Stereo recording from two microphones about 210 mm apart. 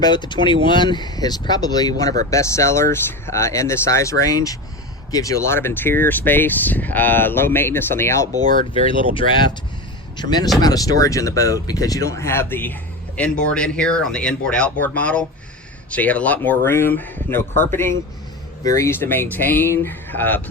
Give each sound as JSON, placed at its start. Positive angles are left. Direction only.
{"t": 0.0, "sound": "speech", "side_deg": 20}
{"t": 8.7, "sound": "speech", "side_deg": 25}